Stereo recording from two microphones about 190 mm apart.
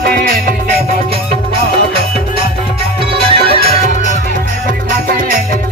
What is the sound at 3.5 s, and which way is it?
Music, 50° left (ahead or behind).